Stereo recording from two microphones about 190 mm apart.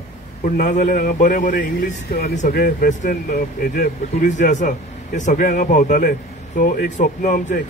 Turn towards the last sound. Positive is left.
turn(degrees=40)  # may be behind; listen again after turning